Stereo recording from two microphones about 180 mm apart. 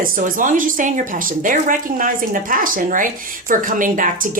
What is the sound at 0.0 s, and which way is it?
A woman's voice, 45° right (ahead or behind).